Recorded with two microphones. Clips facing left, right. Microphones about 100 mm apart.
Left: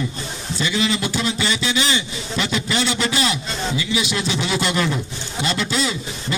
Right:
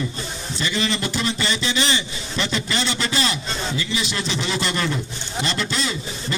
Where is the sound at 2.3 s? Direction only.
5° left (ahead or behind).